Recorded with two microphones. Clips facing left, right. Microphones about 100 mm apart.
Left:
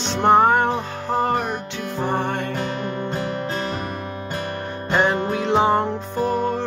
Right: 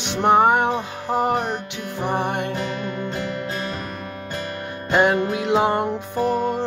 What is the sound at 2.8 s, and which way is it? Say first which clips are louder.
Music: left 1 dB; 30° left (ahead or behind).